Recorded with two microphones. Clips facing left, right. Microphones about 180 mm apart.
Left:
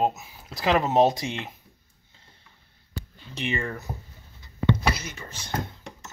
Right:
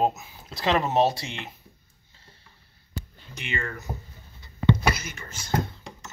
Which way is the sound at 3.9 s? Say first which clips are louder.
Right 1 dB; 15° right (ahead or behind).